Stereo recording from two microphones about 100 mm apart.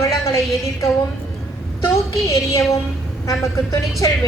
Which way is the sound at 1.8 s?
30° left (ahead or behind).